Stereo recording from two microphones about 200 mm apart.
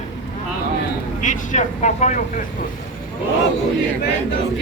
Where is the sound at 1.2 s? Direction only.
35° left (ahead or behind).